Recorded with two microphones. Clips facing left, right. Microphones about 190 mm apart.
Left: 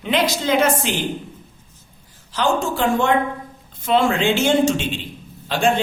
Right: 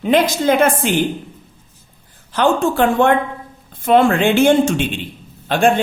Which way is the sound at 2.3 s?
60° right (ahead or behind).